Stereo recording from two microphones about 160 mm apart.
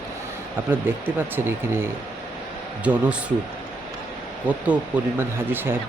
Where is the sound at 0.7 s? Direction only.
15° right (ahead or behind).